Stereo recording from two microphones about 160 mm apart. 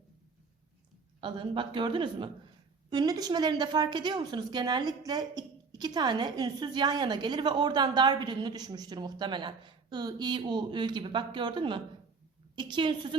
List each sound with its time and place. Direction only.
1.2 s a man's voice: 30° right (ahead or behind)